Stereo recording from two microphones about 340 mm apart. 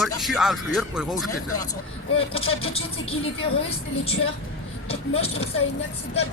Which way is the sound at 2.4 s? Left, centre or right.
Left.